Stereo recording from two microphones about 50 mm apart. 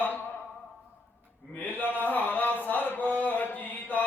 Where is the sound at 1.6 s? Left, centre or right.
Left.